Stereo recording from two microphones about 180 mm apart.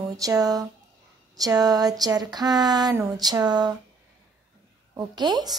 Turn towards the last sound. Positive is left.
turn(degrees=-25)  # may be behind; listen again after turning